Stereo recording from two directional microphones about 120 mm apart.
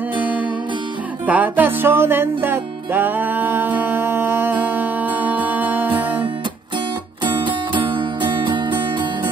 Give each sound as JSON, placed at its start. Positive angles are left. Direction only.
{"t": 0.2, "sound": "music", "side_deg": -10}
{"t": 7.2, "sound": "music", "side_deg": -40}